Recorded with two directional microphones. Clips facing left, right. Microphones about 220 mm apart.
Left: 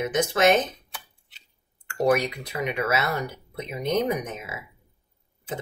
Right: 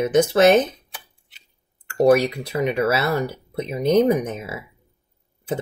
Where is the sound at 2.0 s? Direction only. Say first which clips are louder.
Right 6 dB; 35° right (ahead or behind).